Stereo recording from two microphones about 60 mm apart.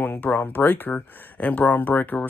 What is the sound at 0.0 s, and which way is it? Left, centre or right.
Speech, left.